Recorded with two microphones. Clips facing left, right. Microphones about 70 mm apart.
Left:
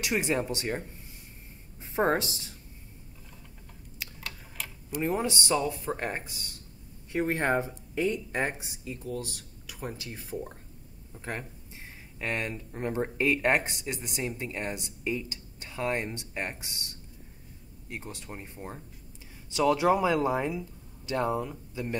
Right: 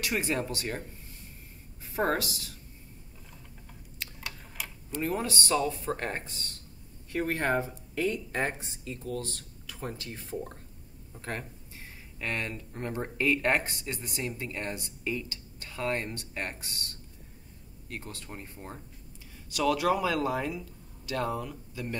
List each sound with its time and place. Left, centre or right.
0.0 s speech: centre
2.0 s speech: left
4.0 s a sound: centre
4.9 s speech: centre
7.1 s speech: left